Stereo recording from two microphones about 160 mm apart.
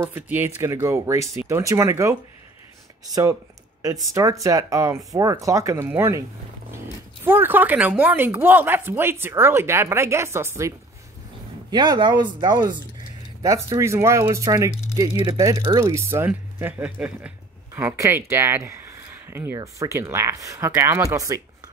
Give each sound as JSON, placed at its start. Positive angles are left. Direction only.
{"t": 0.0, "sound": "speech", "side_deg": -15}
{"t": 3.8, "sound": "speech", "side_deg": -20}
{"t": 7.2, "sound": "speech", "side_deg": -15}
{"t": 11.7, "sound": "speech", "side_deg": -25}